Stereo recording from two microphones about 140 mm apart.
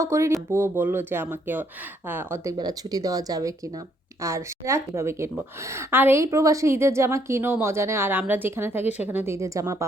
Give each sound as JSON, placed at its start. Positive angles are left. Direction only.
{"t": 0.0, "sound": "a woman's voice", "side_deg": -20}
{"t": 8.8, "sound": "speech", "side_deg": 50}
{"t": 9.0, "sound": "a woman's voice", "side_deg": -15}